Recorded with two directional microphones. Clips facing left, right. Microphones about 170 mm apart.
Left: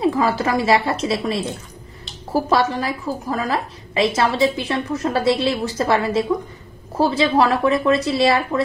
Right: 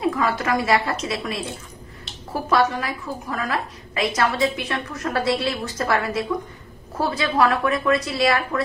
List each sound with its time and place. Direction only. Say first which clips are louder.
0.0 s a woman's voice: left 4 dB; 30° left (ahead or behind)